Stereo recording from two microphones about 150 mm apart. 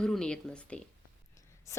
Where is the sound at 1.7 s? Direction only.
20° left (ahead or behind).